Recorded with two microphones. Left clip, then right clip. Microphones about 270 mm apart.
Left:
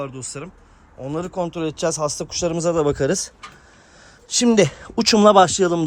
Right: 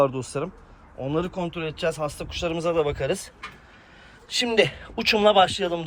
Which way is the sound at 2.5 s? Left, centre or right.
Left.